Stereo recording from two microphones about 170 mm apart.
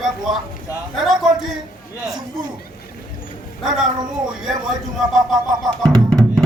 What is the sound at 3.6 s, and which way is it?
A woman's voice, centre (ahead or behind).